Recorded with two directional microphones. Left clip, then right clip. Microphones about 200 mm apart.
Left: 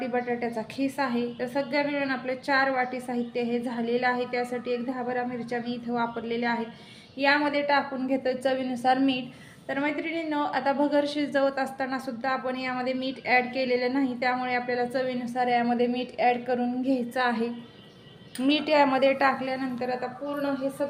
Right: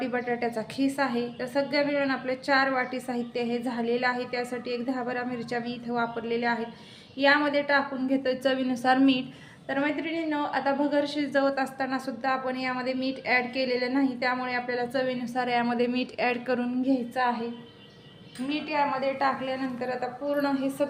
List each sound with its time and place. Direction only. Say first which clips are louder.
0.0 s a woman's voice: even; 15° right (ahead or behind)
17.2 s a woman's voice: left 1 dB; 20° left (ahead or behind)
18.4 s a woman's voice: left 5 dB; 40° left (ahead or behind)
19.4 s a woman's voice: left 1 dB; 15° left (ahead or behind)
19.8 s a woman's voice: left 1 dB; centre (ahead or behind)